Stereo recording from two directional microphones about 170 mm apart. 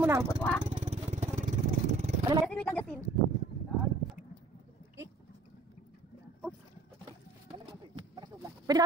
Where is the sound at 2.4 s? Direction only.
5° left (ahead or behind).